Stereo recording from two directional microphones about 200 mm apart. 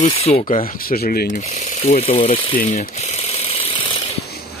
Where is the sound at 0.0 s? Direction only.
35° left (ahead or behind).